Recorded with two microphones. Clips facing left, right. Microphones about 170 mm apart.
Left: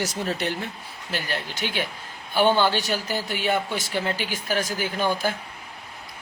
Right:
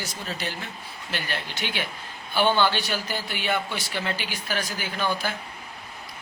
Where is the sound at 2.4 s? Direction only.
10° left (ahead or behind).